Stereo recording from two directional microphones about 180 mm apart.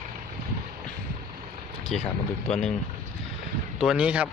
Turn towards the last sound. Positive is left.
turn(degrees=-5)  # may be behind; listen again after turning